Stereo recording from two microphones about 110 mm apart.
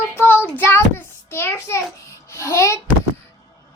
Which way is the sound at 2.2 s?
25° left (ahead or behind).